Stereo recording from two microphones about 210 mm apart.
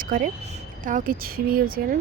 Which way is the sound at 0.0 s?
40° right (ahead or behind).